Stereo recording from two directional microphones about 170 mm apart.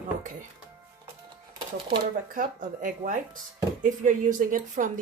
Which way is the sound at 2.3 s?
50° right (ahead or behind).